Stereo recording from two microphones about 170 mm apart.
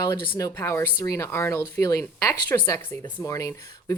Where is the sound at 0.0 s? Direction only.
20° left (ahead or behind).